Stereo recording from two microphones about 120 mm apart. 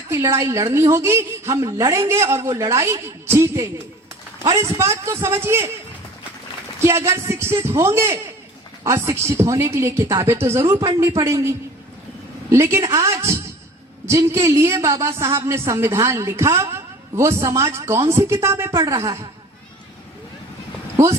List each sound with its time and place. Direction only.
0.1 s a woman's voice: 25° right (ahead or behind)
6.7 s a woman's voice: 20° right (ahead or behind)